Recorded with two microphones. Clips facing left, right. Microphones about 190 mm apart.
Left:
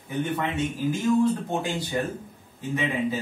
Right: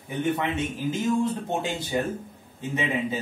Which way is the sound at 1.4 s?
25° right (ahead or behind).